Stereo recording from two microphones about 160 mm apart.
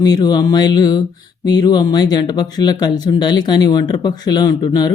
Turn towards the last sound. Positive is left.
turn(degrees=25)  # may be behind; listen again after turning